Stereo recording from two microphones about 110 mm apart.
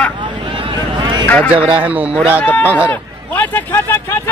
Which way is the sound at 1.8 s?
15° right (ahead or behind).